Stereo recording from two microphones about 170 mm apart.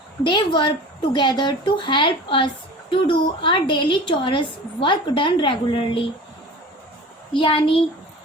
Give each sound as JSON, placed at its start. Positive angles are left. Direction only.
{"t": 0.3, "sound": "a woman's voice", "side_deg": 25}
{"t": 7.3, "sound": "a woman's voice", "side_deg": 30}